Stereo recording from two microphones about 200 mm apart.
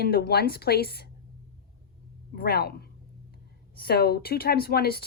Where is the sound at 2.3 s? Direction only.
50° left (ahead or behind).